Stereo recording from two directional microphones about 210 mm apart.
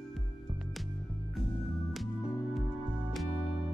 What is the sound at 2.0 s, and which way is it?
Music, centre (ahead or behind).